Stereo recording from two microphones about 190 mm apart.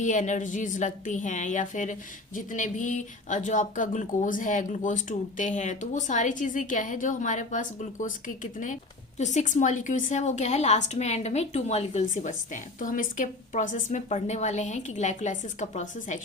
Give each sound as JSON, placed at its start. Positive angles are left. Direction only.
{"t": 0.0, "sound": "a woman's voice", "side_deg": 40}